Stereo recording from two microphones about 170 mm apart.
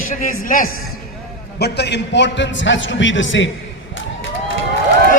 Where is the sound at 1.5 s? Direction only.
75° left (ahead or behind).